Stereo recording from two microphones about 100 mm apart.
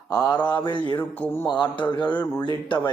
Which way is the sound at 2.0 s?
50° left (ahead or behind).